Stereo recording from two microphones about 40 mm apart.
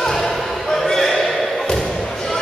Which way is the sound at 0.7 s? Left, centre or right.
Centre.